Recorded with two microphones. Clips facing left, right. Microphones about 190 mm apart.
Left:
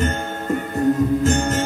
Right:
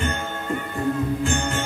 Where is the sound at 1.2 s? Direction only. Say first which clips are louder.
Left 5 dB; 40° left (ahead or behind).